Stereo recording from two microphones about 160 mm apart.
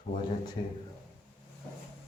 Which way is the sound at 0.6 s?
30° left (ahead or behind).